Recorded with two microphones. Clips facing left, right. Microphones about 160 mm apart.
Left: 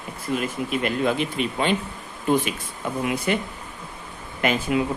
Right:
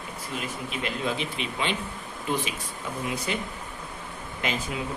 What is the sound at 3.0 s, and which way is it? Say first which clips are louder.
Speech: left 7 dB; 55° left (ahead or behind).